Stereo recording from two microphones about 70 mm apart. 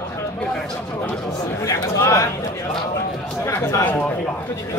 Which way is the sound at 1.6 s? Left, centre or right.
Left.